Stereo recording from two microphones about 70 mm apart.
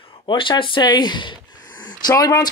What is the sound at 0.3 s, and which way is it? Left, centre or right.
Speech, left.